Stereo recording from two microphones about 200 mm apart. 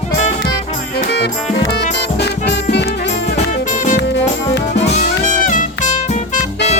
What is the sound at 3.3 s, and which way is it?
Music, 40° left (ahead or behind).